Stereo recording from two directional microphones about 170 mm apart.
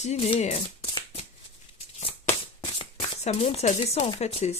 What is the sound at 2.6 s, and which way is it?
Shuffling cards, 35° left (ahead or behind).